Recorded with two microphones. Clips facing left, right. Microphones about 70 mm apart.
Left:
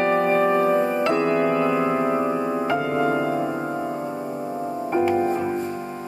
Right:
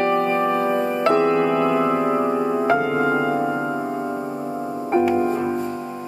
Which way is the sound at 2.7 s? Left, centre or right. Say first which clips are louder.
Right 2 dB; right.